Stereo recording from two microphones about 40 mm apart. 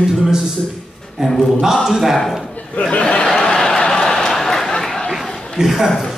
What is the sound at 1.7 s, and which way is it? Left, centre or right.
Speech, centre.